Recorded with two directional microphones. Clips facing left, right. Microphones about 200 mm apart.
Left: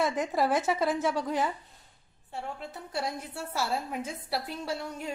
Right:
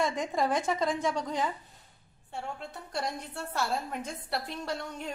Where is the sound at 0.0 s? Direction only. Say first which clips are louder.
Left 2 dB; 5° left (ahead or behind).